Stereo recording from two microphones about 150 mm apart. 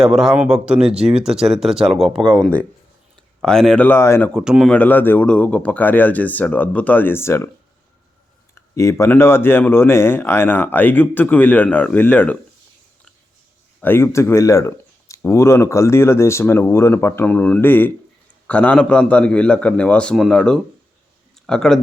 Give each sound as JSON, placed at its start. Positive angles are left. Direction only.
{"t": 0.0, "sound": "speech", "side_deg": -5}
{"t": 4.4, "sound": "speech", "side_deg": 0}
{"t": 4.7, "sound": "speech", "side_deg": 10}
{"t": 8.5, "sound": "speech", "side_deg": 20}
{"t": 13.8, "sound": "speech", "side_deg": 15}